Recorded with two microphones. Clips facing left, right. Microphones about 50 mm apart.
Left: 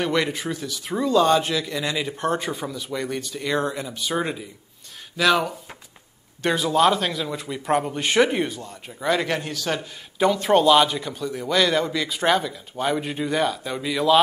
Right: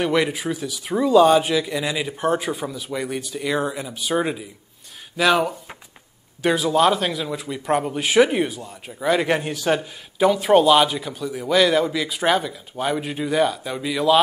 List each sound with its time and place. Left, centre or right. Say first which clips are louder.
0.0 s a man's voice: right 3 dB; centre
9.2 s speech: right 4 dB; centre
9.8 s a man's voice: right 2 dB; centre